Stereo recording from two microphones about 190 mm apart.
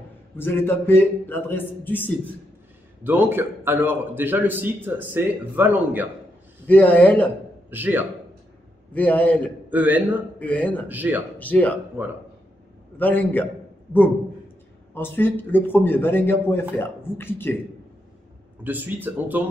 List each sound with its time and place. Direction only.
0.4 s a man's voice: 10° left (ahead or behind)
3.0 s a man's voice: 10° right (ahead or behind)
6.7 s a man's voice: 10° left (ahead or behind)
7.7 s a man's voice: 10° right (ahead or behind)
8.9 s a man's voice: 10° left (ahead or behind)
9.7 s a man's voice: 10° right (ahead or behind)
10.4 s a man's voice: 10° left (ahead or behind)
10.9 s a man's voice: 10° right (ahead or behind)
11.3 s speech: 10° left (ahead or behind)
12.9 s a man's voice: 10° left (ahead or behind)
15.0 s a man's voice: 10° left (ahead or behind)
18.6 s a man's voice: 10° right (ahead or behind)